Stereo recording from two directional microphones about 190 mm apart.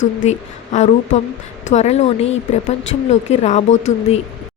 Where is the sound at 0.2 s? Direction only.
40° left (ahead or behind).